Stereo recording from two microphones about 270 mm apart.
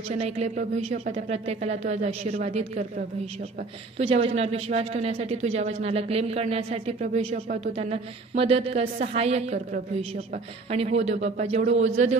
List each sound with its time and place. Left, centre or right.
0.1 s a woman's voice: right
4.0 s a woman's voice: right
10.7 s a woman's voice: right